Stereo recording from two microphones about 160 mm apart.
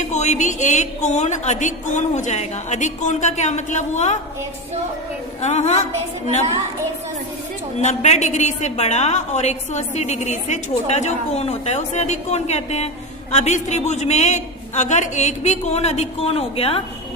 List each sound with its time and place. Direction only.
0.0 s a woman's voice: 45° left (ahead or behind)
5.4 s a woman's voice: 45° left (ahead or behind)
7.8 s a woman's voice: 45° left (ahead or behind)